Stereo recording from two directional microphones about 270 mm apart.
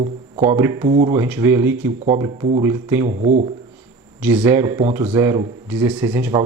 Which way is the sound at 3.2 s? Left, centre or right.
Right.